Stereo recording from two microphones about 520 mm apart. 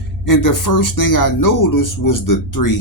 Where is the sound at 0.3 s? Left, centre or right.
Left.